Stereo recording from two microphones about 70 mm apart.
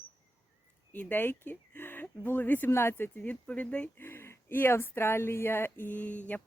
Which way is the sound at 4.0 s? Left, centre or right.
Left.